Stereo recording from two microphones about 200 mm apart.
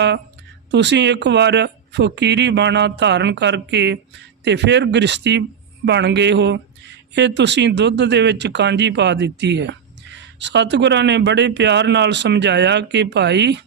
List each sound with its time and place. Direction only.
0.7 s speech: 60° right (ahead or behind)